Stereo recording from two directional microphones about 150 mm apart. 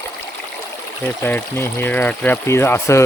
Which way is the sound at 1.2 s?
10° left (ahead or behind).